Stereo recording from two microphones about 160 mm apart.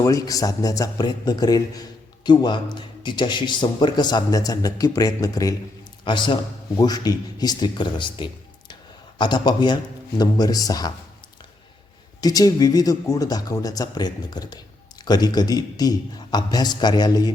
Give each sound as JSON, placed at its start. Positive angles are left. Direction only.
{"t": 0.0, "sound": "a man's voice", "side_deg": 20}
{"t": 12.2, "sound": "a man's voice", "side_deg": 25}